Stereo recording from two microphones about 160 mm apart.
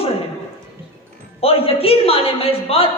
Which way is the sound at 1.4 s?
35° left (ahead or behind).